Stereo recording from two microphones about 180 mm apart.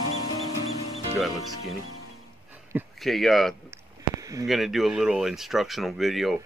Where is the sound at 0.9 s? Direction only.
Centre (ahead or behind).